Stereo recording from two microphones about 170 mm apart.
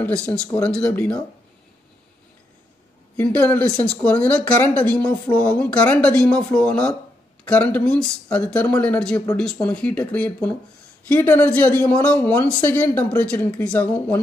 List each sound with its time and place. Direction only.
0.0 s speech: 5° left (ahead or behind)
3.2 s speech: 10° left (ahead or behind)